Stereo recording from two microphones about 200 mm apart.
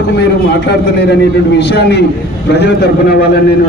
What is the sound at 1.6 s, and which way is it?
A man's voice, 55° left (ahead or behind).